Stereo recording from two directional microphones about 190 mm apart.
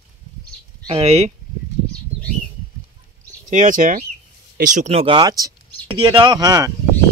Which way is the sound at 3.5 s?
40° right (ahead or behind).